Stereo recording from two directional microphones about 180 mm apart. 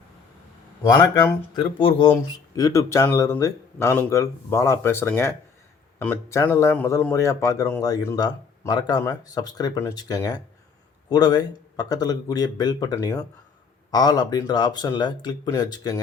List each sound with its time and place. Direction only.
0.8 s speech: 20° left (ahead or behind)
1.8 s speech: 30° left (ahead or behind)